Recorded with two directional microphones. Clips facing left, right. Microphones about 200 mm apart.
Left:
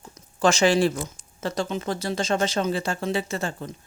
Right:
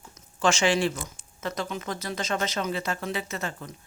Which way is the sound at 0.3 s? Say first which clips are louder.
Left 4 dB; 40° left (ahead or behind).